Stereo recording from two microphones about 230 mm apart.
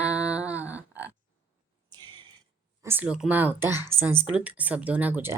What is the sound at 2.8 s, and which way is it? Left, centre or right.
Speech, centre.